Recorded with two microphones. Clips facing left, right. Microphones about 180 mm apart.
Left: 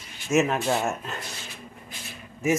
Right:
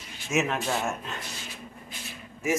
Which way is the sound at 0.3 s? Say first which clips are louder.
Left 5 dB; centre (ahead or behind).